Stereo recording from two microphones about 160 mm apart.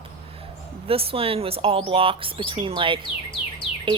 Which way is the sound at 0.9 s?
35° right (ahead or behind).